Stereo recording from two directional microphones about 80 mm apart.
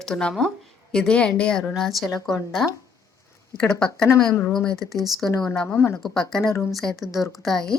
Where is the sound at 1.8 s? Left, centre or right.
Centre.